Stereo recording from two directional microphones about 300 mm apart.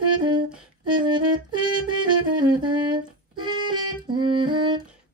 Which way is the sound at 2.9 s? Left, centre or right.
Centre.